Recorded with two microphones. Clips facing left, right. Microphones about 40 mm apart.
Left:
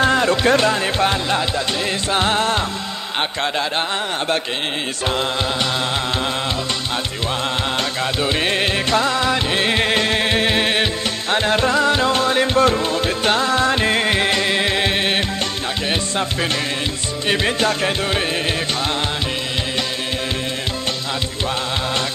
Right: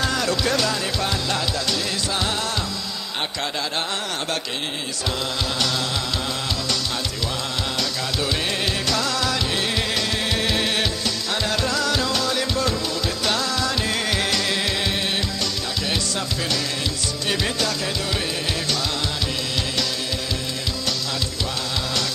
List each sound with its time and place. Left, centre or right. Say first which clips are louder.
0.0 s music: left 7 dB; left
8.2 s music: left 5 dB; left
17.3 s music: left 6 dB; left